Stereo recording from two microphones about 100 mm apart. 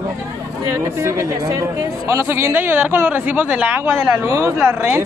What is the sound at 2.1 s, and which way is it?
Speech, 30° right (ahead or behind).